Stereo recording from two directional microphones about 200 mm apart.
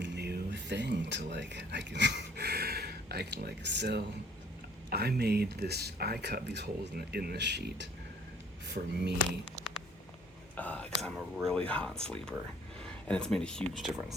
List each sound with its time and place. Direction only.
0.0 s speech: 60° right (ahead or behind)
9.6 s a sound: 20° right (ahead or behind)
10.6 s speech: 5° left (ahead or behind)